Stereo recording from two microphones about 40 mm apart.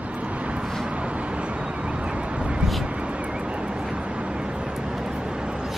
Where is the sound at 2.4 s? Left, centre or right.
Centre.